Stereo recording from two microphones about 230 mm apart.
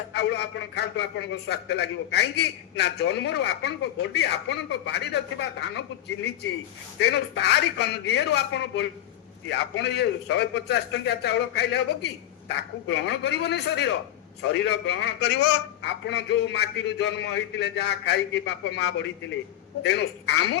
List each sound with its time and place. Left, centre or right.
0.1 s a man's voice: left
7.0 s a man's voice: left